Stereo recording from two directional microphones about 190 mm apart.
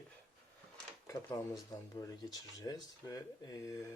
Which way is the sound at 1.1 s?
15° left (ahead or behind).